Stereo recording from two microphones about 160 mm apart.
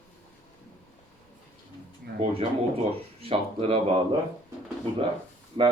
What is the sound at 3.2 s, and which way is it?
Speech, 35° right (ahead or behind).